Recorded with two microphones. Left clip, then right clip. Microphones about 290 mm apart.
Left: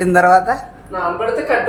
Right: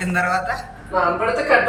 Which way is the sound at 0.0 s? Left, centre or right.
Centre.